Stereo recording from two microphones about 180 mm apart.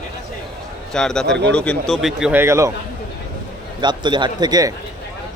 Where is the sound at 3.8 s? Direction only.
25° right (ahead or behind).